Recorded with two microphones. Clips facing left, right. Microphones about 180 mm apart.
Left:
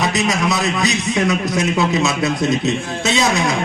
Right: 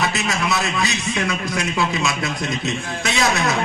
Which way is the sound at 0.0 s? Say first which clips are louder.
Left 4 dB; 20° left (ahead or behind).